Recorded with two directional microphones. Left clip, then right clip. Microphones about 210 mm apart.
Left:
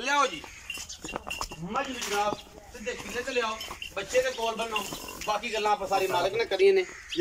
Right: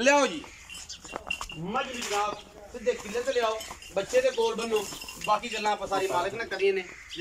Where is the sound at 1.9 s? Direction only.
Centre (ahead or behind).